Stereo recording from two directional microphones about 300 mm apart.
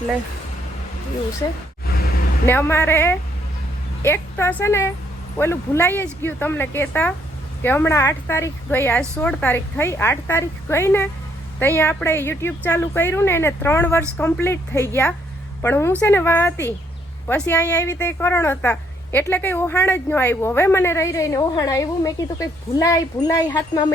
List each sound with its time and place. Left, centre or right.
1.4 s speech: centre
1.9 s vehicle: left
2.5 s speech: centre